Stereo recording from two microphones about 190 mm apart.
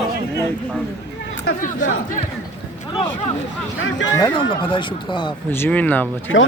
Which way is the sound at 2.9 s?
30° left (ahead or behind).